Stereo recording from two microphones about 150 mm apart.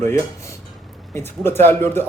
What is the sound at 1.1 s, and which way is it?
Speech, 15° left (ahead or behind).